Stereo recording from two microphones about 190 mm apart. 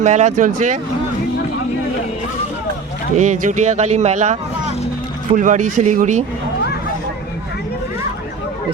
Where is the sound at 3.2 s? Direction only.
40° right (ahead or behind).